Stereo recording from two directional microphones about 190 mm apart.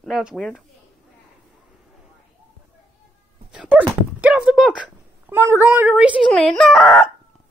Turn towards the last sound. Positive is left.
turn(degrees=0)  # may be behind; listen again after turning